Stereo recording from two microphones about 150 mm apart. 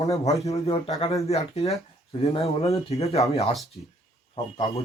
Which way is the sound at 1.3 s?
45° left (ahead or behind).